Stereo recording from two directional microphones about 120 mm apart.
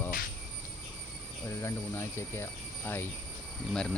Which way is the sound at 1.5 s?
20° left (ahead or behind).